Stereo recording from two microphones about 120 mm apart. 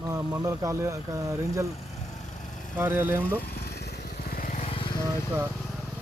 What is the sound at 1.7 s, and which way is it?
Vehicle, 80° left.